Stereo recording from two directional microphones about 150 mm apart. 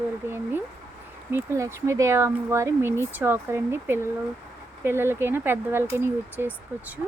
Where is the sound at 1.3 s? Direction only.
15° right (ahead or behind).